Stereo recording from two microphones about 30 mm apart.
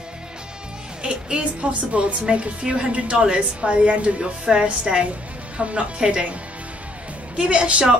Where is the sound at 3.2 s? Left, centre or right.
Right.